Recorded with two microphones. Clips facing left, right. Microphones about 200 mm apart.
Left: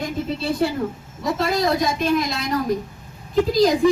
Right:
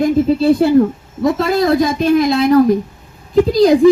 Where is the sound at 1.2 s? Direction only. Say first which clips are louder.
Right 7 dB; 55° right (ahead or behind).